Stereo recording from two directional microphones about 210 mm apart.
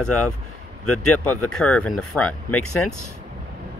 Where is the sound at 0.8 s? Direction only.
90° left.